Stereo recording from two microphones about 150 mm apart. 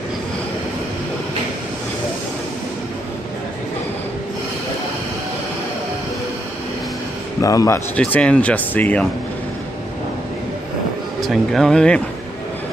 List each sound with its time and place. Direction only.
7.4 s a man's voice: 20° left (ahead or behind)
7.9 s speech: 10° left (ahead or behind)
11.1 s speech: centre (ahead or behind)